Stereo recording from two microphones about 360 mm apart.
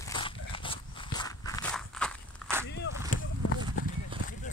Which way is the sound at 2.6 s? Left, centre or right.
Left.